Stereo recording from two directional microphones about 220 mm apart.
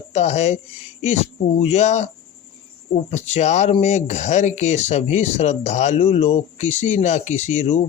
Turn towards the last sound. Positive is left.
turn(degrees=30)  # may be behind; listen again after turning